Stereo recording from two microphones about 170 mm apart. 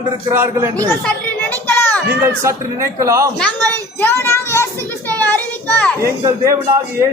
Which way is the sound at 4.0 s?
15° left (ahead or behind).